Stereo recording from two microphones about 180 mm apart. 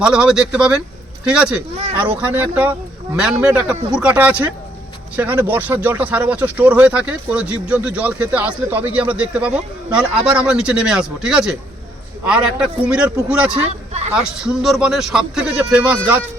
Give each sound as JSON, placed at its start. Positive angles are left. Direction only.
{"t": 0.0, "sound": "speech", "side_deg": -5}
{"t": 13.5, "sound": "a sound", "side_deg": -35}
{"t": 14.3, "sound": "speech", "side_deg": -5}